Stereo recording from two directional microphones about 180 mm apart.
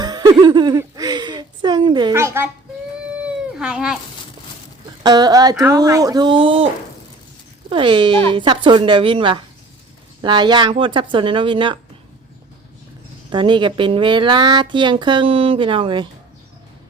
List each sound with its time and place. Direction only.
0.0 s speech: 25° right (ahead or behind)
3.1 s a sound: 5° right (ahead or behind)
5.0 s speech: 20° right (ahead or behind)
7.7 s speech: 25° right (ahead or behind)
13.3 s speech: 25° right (ahead or behind)